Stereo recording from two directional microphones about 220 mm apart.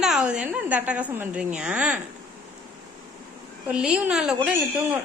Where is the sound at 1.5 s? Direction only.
5° right (ahead or behind).